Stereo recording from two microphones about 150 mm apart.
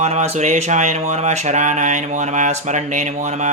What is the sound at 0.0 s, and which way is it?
Speech, 45° right (ahead or behind).